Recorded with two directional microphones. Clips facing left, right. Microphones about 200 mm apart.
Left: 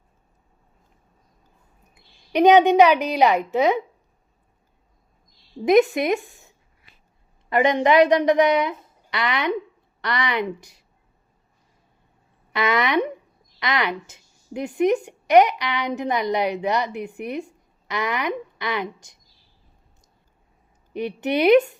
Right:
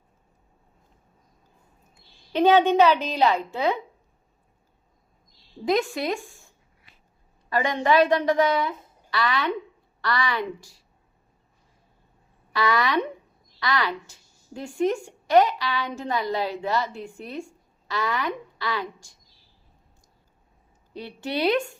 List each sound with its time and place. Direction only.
2.0 s a woman's voice: 20° left (ahead or behind)
5.6 s a woman's voice: 20° left (ahead or behind)
7.5 s a woman's voice: 20° left (ahead or behind)
12.5 s a woman's voice: 20° left (ahead or behind)
20.9 s a woman's voice: 20° left (ahead or behind)